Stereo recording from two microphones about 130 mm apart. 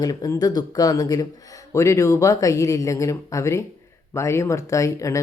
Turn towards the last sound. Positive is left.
turn(degrees=25)  # may be behind; listen again after turning